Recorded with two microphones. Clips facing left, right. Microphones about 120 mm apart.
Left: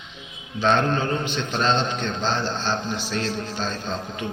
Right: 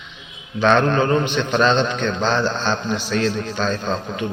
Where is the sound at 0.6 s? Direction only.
70° right (ahead or behind).